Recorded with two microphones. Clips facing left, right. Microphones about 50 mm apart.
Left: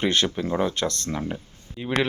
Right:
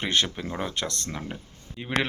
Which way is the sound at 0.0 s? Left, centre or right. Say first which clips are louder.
Left 3 dB; centre.